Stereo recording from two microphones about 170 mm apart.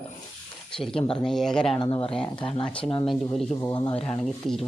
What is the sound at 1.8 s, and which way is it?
Speech, 35° left (ahead or behind).